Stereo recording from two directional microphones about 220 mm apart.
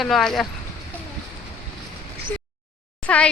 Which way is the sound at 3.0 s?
5° left (ahead or behind).